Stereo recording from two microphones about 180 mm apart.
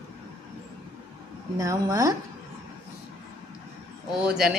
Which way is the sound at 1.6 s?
20° right (ahead or behind).